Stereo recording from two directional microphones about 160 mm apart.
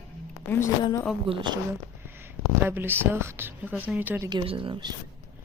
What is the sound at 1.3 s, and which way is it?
Speech, 30° right (ahead or behind).